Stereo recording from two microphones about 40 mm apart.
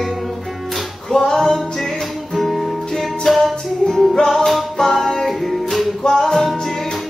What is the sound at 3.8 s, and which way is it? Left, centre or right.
Music, centre.